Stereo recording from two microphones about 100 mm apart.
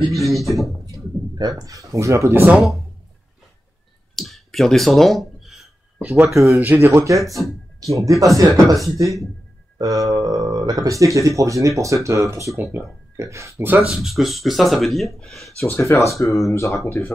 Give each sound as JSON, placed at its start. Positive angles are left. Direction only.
{"t": 0.1, "sound": "speech", "side_deg": 0}
{"t": 1.6, "sound": "speech", "side_deg": -35}
{"t": 2.5, "sound": "speech", "side_deg": -5}
{"t": 4.1, "sound": "a sound", "side_deg": 0}
{"t": 5.9, "sound": "speech", "side_deg": -10}
{"t": 6.3, "sound": "speech", "side_deg": -30}
{"t": 6.6, "sound": "speech", "side_deg": -20}
{"t": 6.9, "sound": "speech", "side_deg": -30}
{"t": 7.4, "sound": "speech", "side_deg": 25}
{"t": 7.8, "sound": "speech", "side_deg": -30}
{"t": 13.8, "sound": "speech", "side_deg": 0}
{"t": 15.6, "sound": "speech", "side_deg": 30}